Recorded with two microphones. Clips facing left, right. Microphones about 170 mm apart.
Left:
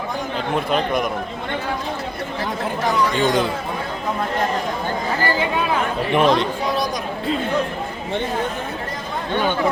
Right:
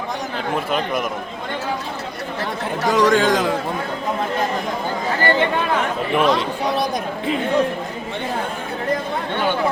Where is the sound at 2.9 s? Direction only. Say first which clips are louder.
Right 4 dB; 90° right.